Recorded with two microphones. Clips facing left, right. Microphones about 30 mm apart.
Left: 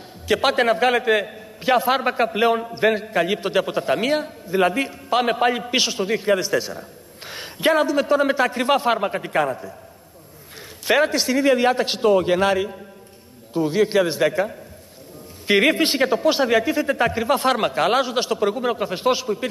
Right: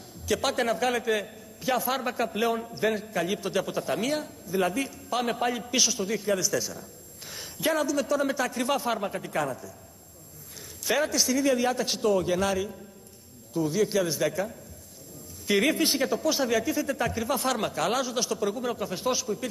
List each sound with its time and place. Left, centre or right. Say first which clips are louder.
0.3 s a man's voice: left 8 dB; left
10.9 s a man's voice: left 7 dB; left